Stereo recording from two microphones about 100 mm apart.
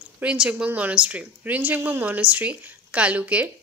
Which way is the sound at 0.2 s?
10° right (ahead or behind).